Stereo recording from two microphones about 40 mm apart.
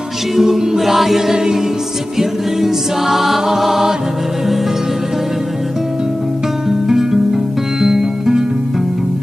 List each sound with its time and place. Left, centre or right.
0.4 s choir: centre
1.3 s music: centre
6.9 s music: centre